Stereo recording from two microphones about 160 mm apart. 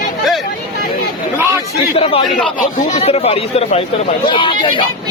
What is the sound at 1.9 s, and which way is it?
Speech, 35° left (ahead or behind).